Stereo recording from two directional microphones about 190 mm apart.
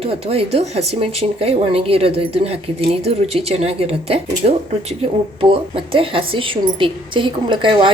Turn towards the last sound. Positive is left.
turn(degrees=-25)  # may be behind; listen again after turning